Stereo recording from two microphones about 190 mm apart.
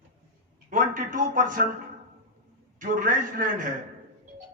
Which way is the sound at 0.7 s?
45° right (ahead or behind).